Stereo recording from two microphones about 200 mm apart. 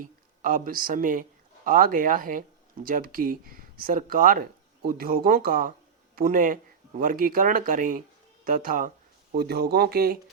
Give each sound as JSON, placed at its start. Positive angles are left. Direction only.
{"t": 0.0, "sound": "speech", "side_deg": -40}